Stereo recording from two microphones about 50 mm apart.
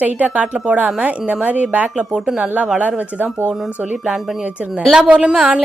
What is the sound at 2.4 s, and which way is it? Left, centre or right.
A woman's voice, right.